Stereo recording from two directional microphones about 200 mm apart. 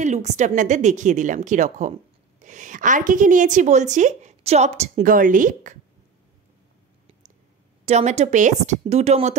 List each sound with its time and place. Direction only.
0.0 s a woman's voice: 35° right (ahead or behind)
7.8 s a woman's voice: 35° right (ahead or behind)